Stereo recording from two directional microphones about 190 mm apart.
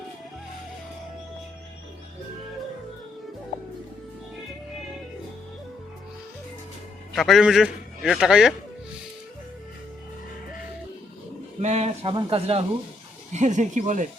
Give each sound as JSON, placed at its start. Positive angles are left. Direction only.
{"t": 7.2, "sound": "a man's voice", "side_deg": 0}
{"t": 11.6, "sound": "speech", "side_deg": -35}